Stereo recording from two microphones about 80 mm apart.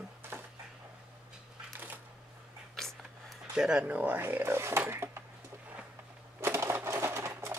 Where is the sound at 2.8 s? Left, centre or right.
Centre.